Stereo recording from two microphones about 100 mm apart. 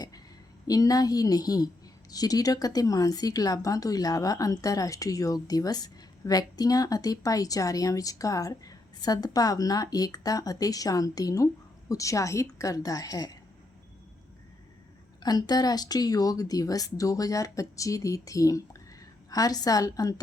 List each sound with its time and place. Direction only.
0.7 s a woman's voice: 40° left (ahead or behind)
15.2 s a woman's voice: 40° left (ahead or behind)